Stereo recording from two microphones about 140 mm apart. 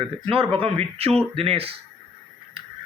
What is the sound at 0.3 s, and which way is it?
A man's voice, 40° right (ahead or behind).